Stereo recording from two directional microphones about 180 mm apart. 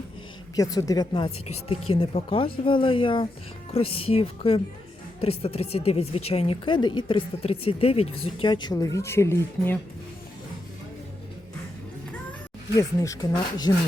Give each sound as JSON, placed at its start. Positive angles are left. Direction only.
{"t": 0.5, "sound": "speech", "side_deg": 20}
{"t": 12.7, "sound": "speech", "side_deg": 20}